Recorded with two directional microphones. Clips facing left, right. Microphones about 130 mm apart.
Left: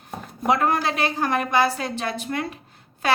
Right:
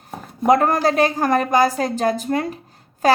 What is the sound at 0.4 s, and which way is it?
A woman's voice, 45° right (ahead or behind).